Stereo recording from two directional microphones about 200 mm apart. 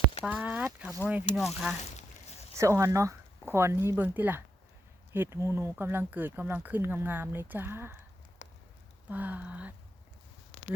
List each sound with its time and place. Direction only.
0.3 s speech: 5° right (ahead or behind)
2.6 s speech: 15° right (ahead or behind)
8.4 s clip-clop: 35° left (ahead or behind)
9.0 s speech: 10° right (ahead or behind)